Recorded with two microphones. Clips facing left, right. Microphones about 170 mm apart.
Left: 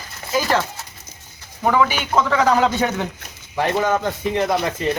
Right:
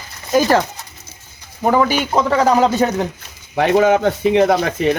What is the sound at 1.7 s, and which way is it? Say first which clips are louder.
Speech: right 3 dB; 40° right (ahead or behind).